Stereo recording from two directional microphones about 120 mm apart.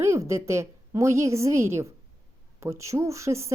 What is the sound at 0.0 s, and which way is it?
A woman's voice, 25° right (ahead or behind).